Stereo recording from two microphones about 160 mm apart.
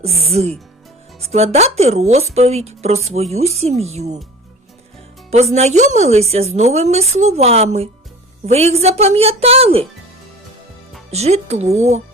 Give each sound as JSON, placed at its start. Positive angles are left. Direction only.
{"t": 0.0, "sound": "a woman's voice", "side_deg": -40}
{"t": 5.3, "sound": "a woman's voice", "side_deg": -40}
{"t": 11.1, "sound": "a woman's voice", "side_deg": -40}